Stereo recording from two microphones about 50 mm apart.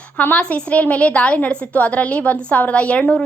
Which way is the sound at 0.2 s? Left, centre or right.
Left.